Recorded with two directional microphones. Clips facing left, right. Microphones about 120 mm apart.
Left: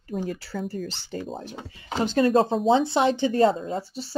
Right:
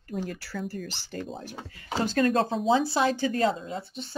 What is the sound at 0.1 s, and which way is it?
Speech, 45° left (ahead or behind).